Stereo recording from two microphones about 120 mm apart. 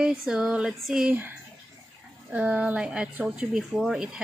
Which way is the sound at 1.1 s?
15° right (ahead or behind).